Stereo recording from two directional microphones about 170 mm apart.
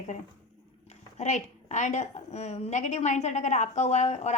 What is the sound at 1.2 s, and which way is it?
A woman's voice, 45° left (ahead or behind).